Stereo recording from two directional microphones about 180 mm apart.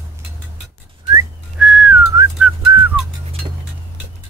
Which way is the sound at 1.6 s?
5° right (ahead or behind).